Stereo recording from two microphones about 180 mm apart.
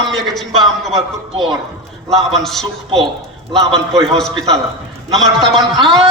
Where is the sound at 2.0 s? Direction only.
Centre (ahead or behind).